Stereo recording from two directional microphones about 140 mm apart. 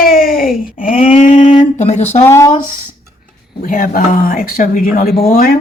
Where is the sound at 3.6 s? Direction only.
80° left.